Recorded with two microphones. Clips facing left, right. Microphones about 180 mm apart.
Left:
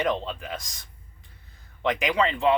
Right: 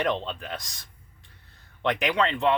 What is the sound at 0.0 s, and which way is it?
Speech, centre (ahead or behind).